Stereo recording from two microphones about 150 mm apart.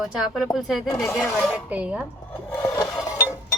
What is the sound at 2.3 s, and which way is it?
Wood, 15° left (ahead or behind).